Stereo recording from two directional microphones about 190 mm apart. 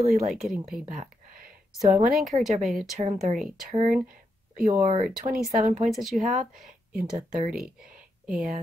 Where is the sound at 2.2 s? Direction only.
Centre (ahead or behind).